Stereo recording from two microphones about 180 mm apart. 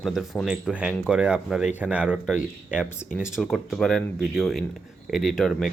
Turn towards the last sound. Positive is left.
turn(degrees=0)  # may be behind; listen again after turning